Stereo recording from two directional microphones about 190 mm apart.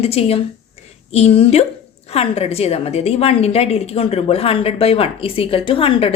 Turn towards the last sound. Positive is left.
turn(degrees=30)  # may be behind; listen again after turning